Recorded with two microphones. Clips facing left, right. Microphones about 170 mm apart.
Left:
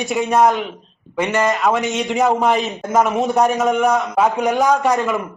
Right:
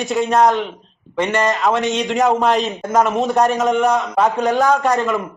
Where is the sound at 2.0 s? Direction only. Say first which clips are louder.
Even; centre (ahead or behind).